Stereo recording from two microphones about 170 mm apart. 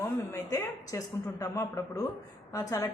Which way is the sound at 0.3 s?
20° left (ahead or behind).